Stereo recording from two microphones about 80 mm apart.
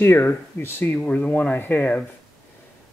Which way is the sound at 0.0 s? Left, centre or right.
Left.